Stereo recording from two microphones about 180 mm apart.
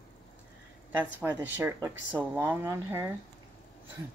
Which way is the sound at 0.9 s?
10° right (ahead or behind).